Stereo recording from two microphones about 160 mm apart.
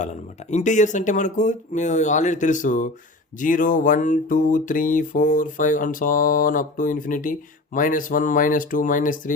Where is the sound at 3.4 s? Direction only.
55° left (ahead or behind).